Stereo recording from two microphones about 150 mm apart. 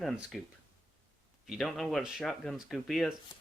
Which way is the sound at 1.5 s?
Centre (ahead or behind).